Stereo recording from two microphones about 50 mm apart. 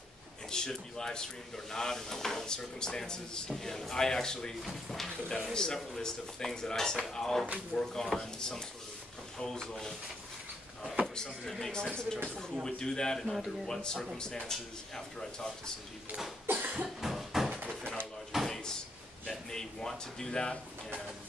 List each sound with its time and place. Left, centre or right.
0.5 s speech: centre
4.6 s speech: centre
11.1 s speech: centre
14.1 s speech: centre
16.4 s cough: right
17.0 s a sound: centre
18.3 s drawer open or close: centre
19.2 s speech: centre